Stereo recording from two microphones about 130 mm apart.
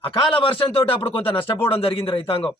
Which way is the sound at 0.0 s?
40° left (ahead or behind).